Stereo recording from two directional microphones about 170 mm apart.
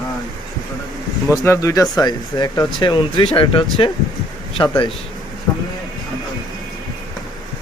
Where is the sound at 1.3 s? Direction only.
20° left (ahead or behind).